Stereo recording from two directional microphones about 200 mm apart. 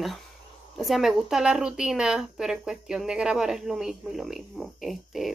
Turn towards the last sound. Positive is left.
turn(degrees=0)  # may be behind; listen again after turning